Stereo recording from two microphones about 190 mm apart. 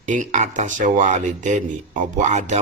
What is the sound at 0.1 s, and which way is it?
Speech, 40° right (ahead or behind).